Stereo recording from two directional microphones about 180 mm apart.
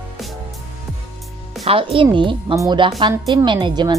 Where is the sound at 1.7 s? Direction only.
30° right (ahead or behind).